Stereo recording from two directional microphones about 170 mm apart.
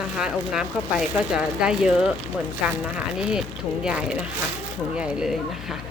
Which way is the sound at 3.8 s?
5° right (ahead or behind).